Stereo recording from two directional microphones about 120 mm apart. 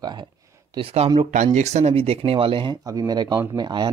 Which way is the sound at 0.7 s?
55° right (ahead or behind).